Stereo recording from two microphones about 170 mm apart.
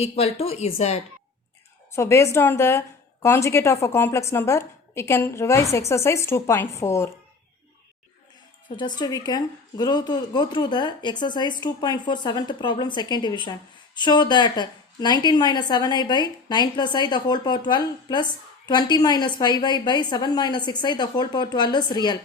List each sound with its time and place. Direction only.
0.0 s speech: 35° left (ahead or behind)
1.9 s a woman's voice: 15° left (ahead or behind)
9.0 s speech: 25° left (ahead or behind)